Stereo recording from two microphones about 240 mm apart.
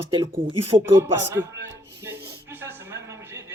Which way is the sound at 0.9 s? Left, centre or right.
Centre.